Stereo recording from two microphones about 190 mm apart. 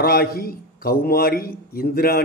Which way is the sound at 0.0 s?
55° left (ahead or behind).